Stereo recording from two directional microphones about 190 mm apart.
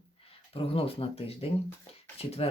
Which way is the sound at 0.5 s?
30° left (ahead or behind).